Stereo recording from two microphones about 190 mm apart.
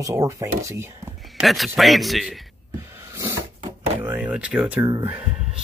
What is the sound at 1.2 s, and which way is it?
A man's voice, centre (ahead or behind).